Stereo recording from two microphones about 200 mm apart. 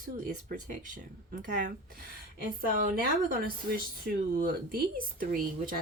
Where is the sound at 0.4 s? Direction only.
40° right (ahead or behind).